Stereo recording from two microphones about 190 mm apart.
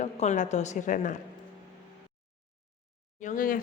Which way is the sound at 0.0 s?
40° left (ahead or behind).